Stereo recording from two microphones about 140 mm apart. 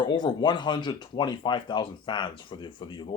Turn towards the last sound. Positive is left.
turn(degrees=35)  # may be behind; listen again after turning